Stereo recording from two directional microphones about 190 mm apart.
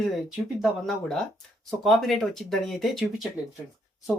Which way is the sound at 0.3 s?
Centre (ahead or behind).